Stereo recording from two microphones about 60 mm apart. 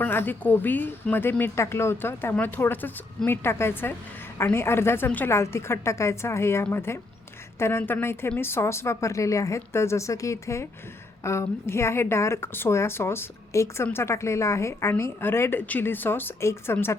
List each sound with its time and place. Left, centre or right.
0.0 s a woman's voice: left
5.3 s a woman's voice: left
9.7 s a woman's voice: left
16.4 s a woman's voice: left